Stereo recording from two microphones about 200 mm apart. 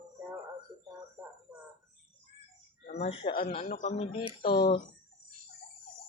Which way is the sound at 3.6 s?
40° left (ahead or behind).